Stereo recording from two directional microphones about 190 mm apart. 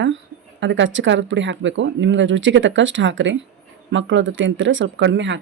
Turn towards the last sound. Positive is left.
turn(degrees=-70)  # may be behind; listen again after turning